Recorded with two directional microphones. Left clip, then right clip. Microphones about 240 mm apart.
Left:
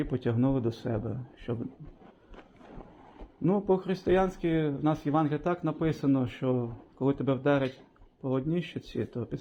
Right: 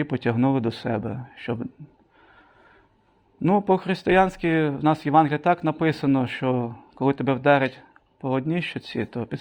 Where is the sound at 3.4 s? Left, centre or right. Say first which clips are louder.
Right 7 dB; right.